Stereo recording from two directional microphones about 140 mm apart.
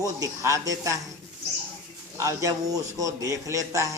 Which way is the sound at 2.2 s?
20° right (ahead or behind).